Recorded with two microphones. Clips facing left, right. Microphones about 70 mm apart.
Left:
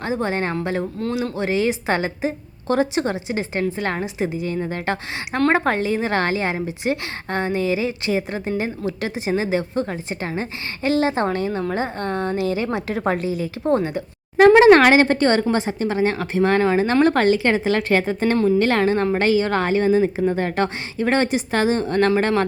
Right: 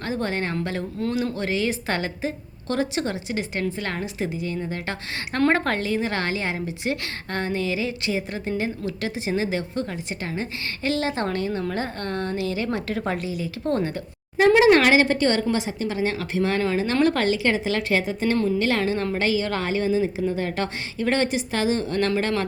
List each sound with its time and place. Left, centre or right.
0.0 s a woman's voice: left
4.6 s a woman's voice: left
5.5 s a woman's voice: centre
13.7 s a woman's voice: centre
14.5 s a woman's voice: left